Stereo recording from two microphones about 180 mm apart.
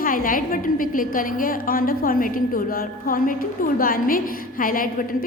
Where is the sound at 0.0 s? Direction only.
50° left (ahead or behind).